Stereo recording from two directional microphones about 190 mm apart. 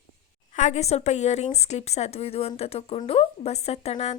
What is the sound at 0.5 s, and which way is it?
A woman's voice, 40° left (ahead or behind).